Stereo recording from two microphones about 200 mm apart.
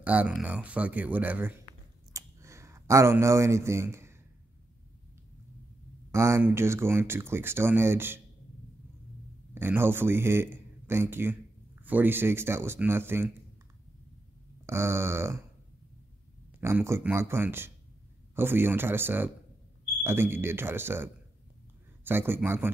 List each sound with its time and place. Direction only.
0.0 s speech: 5° right (ahead or behind)
2.1 s a sound: 15° right (ahead or behind)
6.1 s speech: 15° right (ahead or behind)
9.5 s a man's voice: 10° right (ahead or behind)
14.7 s speech: 15° right (ahead or behind)
16.6 s speech: 15° right (ahead or behind)